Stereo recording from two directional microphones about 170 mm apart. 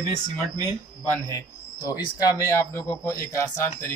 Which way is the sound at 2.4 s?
15° left (ahead or behind).